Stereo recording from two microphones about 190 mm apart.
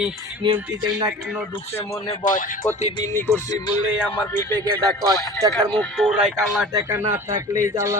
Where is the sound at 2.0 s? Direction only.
40° left (ahead or behind).